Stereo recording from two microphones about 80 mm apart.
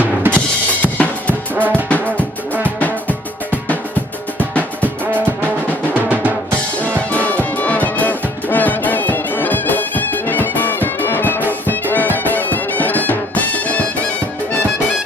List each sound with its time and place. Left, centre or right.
0.0 s drum kit: right
0.3 s drum kit: centre
1.5 s music: right
2.8 s music: centre
5.9 s drum: centre
6.8 s music: centre